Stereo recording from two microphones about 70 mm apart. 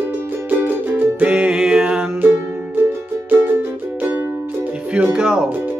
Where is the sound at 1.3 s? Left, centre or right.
Centre.